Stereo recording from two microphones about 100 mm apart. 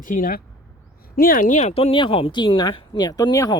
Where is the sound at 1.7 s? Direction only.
85° left.